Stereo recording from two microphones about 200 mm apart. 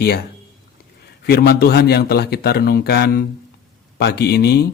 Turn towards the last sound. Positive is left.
turn(degrees=55)  # may be behind; listen again after turning